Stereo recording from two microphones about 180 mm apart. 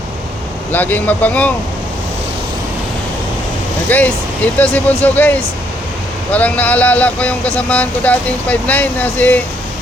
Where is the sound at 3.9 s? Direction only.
10° left (ahead or behind).